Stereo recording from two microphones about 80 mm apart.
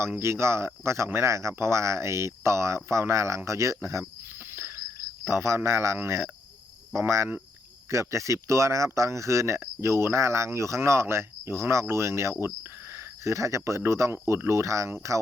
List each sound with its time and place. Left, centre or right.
0.2 s speech: right
4.4 s a sound: right
5.2 s speech: right